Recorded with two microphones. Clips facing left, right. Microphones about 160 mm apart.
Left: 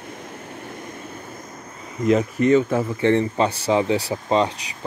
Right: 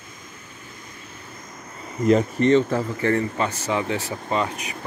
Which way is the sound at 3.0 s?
20° left (ahead or behind).